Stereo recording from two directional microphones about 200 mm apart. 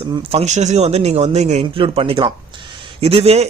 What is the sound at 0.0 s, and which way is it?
A man's voice, 25° right (ahead or behind).